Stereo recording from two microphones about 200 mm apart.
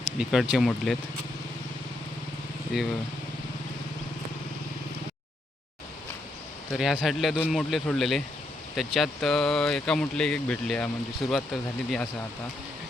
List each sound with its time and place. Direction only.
0.0 s speech: 5° right (ahead or behind)
2.7 s speech: centre (ahead or behind)
6.7 s speech: centre (ahead or behind)